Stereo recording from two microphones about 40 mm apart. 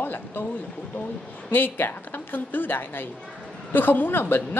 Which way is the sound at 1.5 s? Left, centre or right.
Left.